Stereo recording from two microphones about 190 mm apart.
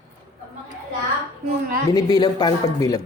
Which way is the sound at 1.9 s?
20° left (ahead or behind).